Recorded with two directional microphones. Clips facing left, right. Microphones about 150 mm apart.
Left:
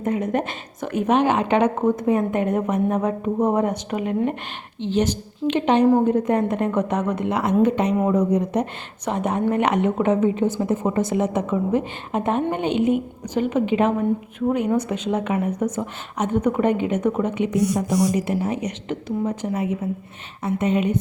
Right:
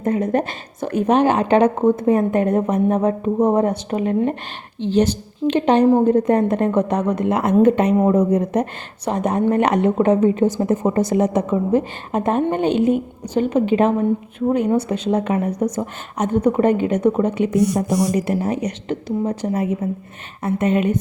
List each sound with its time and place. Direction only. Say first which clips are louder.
0.0 s a woman's voice: right 3 dB; 35° right (ahead or behind)
20.4 s a woman's voice: right 3 dB; 50° right (ahead or behind)